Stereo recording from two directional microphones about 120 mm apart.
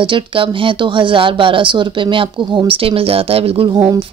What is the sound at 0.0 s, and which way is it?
A woman's voice, 45° right (ahead or behind).